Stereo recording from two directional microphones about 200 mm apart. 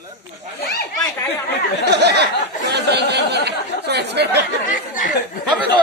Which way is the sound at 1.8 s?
55° right (ahead or behind).